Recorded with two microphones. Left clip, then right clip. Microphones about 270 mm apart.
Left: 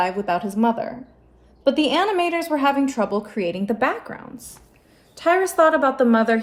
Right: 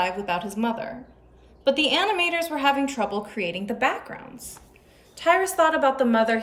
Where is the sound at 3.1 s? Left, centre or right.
Centre.